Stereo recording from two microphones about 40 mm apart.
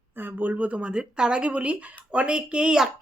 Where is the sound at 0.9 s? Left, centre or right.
Right.